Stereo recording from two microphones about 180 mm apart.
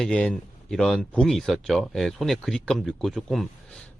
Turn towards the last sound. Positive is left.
turn(degrees=0)  # may be behind; listen again after turning